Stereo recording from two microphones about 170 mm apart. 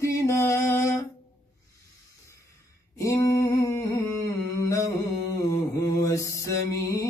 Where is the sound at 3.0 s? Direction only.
20° left (ahead or behind).